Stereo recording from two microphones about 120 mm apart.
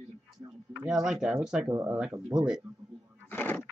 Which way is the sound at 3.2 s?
15° left (ahead or behind).